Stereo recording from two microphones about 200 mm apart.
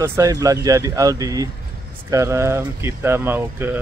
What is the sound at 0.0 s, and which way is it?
Speech, 15° right (ahead or behind).